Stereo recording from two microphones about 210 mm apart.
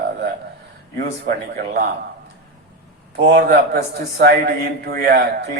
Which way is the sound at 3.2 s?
50° right (ahead or behind).